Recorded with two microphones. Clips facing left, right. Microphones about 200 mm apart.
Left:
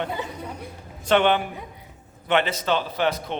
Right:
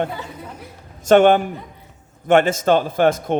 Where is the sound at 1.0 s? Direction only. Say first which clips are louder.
Right 7 dB; 45° right (ahead or behind).